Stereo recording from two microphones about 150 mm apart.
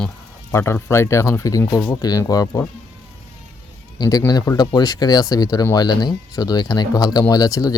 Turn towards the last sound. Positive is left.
turn(degrees=20)  # may be behind; listen again after turning